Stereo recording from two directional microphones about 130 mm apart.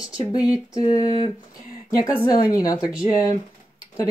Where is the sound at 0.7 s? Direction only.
30° left (ahead or behind).